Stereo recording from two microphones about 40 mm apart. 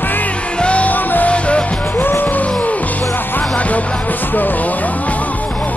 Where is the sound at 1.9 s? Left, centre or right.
Left.